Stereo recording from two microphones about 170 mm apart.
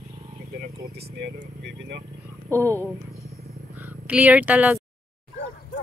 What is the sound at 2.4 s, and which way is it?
Speech, 15° right (ahead or behind).